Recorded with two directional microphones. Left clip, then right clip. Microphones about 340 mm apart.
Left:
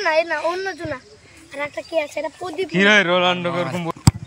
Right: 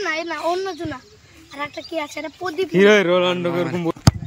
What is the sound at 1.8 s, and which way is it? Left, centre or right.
Speech, right.